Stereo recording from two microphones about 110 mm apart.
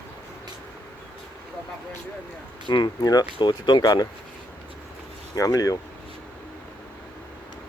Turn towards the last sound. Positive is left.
turn(degrees=30)  # may be behind; listen again after turning